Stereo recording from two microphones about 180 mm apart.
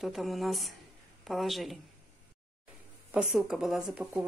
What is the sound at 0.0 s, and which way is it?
Speech, centre (ahead or behind).